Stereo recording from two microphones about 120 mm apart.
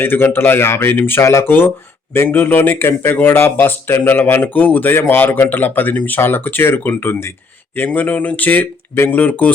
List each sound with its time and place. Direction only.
0.0 s speech: 15° left (ahead or behind)